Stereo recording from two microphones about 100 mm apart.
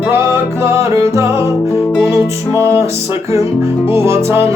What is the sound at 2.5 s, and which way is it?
Music, 30° right (ahead or behind).